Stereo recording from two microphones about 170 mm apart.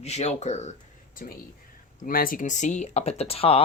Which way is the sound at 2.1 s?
55° left (ahead or behind).